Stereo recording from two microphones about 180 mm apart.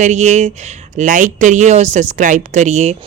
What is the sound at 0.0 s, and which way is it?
Speech, 40° right (ahead or behind).